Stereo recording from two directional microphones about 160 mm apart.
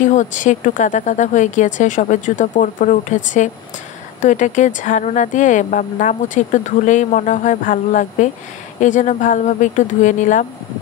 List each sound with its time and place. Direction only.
0.0 s speech: 50° left (ahead or behind)